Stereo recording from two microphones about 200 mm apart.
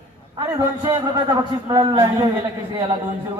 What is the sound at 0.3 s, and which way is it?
A man's voice, 20° right (ahead or behind).